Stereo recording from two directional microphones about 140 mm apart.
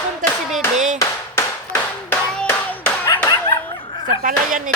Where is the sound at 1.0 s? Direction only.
20° left (ahead or behind).